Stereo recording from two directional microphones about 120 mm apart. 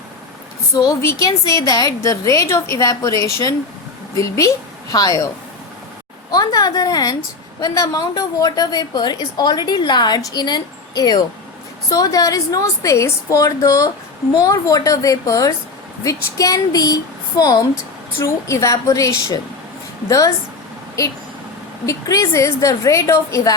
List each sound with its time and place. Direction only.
0.8 s a woman's voice: 25° left (ahead or behind)
6.3 s a woman's voice: 30° left (ahead or behind)